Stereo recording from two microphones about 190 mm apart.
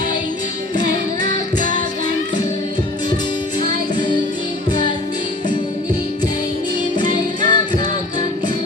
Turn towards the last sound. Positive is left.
turn(degrees=25)  # may be behind; listen again after turning